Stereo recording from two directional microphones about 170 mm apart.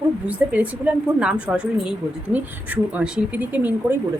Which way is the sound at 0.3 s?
10° right (ahead or behind).